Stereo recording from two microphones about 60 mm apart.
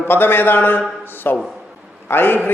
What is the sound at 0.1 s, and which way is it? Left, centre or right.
A man's voice, left.